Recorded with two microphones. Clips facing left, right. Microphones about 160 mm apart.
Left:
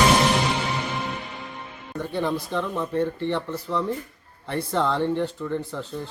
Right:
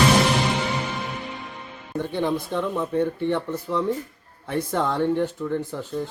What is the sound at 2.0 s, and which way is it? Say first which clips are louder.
A man's voice: right 1 dB; 20° right (ahead or behind).